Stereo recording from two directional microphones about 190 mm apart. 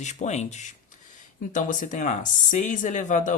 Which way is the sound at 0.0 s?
40° left (ahead or behind).